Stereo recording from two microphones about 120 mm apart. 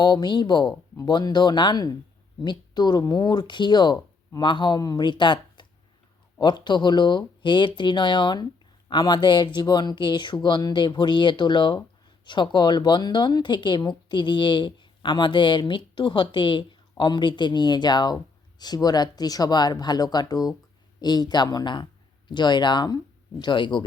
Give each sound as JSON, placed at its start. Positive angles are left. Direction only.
{"t": 0.0, "sound": "a woman's voice", "side_deg": 35}